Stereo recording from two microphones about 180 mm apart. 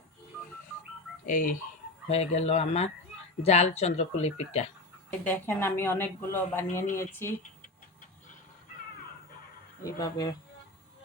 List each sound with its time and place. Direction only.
1.2 s speech: 50° left (ahead or behind)
2.0 s speech: 35° left (ahead or behind)
5.2 s speech: 10° left (ahead or behind)
9.8 s speech: 20° left (ahead or behind)